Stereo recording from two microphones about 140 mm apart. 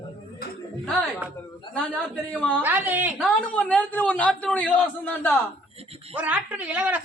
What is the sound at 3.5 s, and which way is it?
A man's voice, 10° left (ahead or behind).